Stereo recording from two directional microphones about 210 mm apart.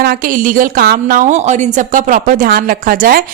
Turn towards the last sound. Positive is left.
turn(degrees=-45)  # may be behind; listen again after turning